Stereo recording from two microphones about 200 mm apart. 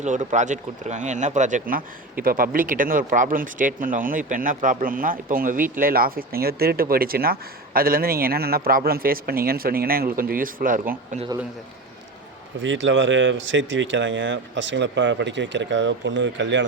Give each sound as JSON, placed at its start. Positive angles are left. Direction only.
{"t": 0.0, "sound": "speech", "side_deg": -35}
{"t": 12.6, "sound": "speech", "side_deg": -70}